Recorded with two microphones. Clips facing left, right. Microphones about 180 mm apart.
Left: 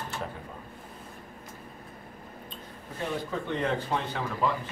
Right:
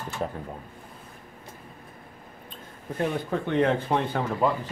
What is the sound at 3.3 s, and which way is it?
Speech, 60° right (ahead or behind).